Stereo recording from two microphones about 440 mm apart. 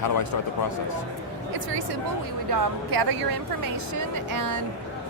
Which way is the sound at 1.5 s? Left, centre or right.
Right.